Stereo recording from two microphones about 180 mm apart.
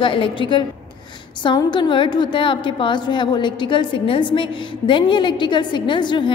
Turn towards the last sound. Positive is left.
turn(degrees=25)  # may be behind; listen again after turning